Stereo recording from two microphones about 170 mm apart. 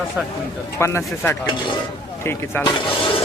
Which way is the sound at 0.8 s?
15° left (ahead or behind).